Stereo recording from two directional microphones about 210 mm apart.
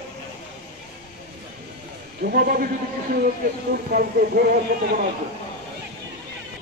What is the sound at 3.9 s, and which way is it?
Speech, 45° right (ahead or behind).